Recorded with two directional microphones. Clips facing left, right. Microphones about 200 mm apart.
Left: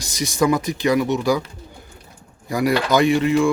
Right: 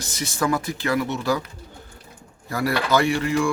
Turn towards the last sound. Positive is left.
turn(degrees=20)  # may be behind; listen again after turning